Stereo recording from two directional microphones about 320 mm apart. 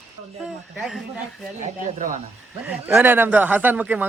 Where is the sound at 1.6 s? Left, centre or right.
Right.